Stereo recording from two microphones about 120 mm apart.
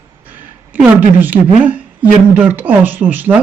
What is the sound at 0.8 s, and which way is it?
Speech, 15° right (ahead or behind).